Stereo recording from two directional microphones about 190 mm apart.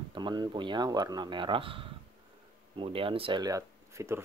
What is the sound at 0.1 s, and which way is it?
Speech, 20° right (ahead or behind).